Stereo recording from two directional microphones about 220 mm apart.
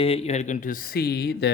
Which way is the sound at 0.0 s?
25° left (ahead or behind).